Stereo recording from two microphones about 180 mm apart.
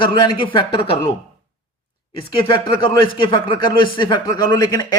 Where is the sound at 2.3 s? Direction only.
25° left (ahead or behind).